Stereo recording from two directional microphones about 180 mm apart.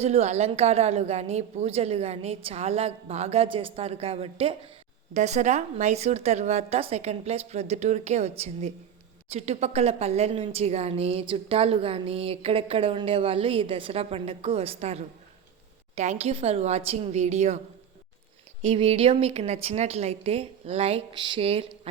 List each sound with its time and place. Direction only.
0.0 s a woman's voice: 35° right (ahead or behind)
18.6 s a woman's voice: 35° right (ahead or behind)